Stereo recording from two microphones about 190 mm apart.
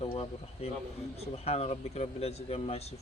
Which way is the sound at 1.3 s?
30° left (ahead or behind).